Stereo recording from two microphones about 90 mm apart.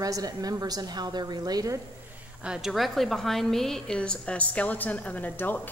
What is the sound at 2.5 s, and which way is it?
A woman's voice, 5° right (ahead or behind).